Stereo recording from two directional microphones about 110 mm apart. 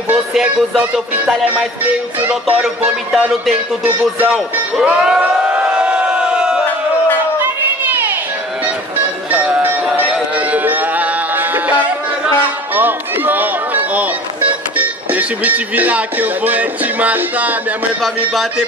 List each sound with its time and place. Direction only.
0.1 s speech: 10° right (ahead or behind)
2.1 s speech: 15° right (ahead or behind)
4.8 s a sound: 5° right (ahead or behind)
9.3 s music: 15° right (ahead or behind)
12.7 s music: 15° right (ahead or behind)
14.8 s speech: 15° right (ahead or behind)
18.0 s speech: centre (ahead or behind)